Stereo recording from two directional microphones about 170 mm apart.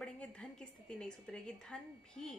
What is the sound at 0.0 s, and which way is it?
A woman's voice, 5° left (ahead or behind).